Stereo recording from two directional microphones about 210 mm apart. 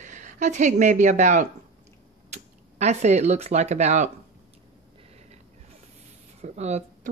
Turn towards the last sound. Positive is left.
turn(degrees=-30)  # may be behind; listen again after turning